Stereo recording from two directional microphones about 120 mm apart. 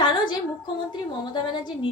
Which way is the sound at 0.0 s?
40° left (ahead or behind).